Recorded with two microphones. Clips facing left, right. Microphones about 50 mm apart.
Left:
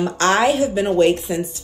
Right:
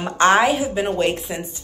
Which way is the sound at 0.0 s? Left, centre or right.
Centre.